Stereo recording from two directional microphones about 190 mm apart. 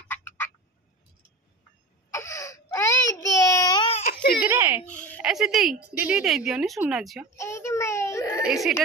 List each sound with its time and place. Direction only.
0.1 s frog: 10° left (ahead or behind)
2.0 s a sound: 15° left (ahead or behind)
3.3 s baby cry: 20° left (ahead or behind)
4.0 s a sound: 55° left (ahead or behind)
4.4 s a child's voice: 10° right (ahead or behind)
7.3 s child singing: 15° left (ahead or behind)
8.5 s a woman's voice: centre (ahead or behind)